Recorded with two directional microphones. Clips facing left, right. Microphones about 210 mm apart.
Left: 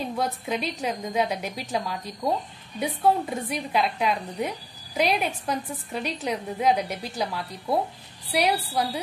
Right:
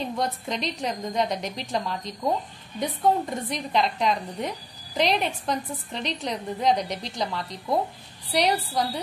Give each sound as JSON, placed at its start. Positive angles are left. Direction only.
{"t": 0.2, "sound": "a woman's voice", "side_deg": 5}